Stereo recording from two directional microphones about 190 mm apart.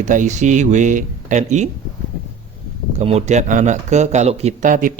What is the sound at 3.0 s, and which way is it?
Speech, 35° right (ahead or behind).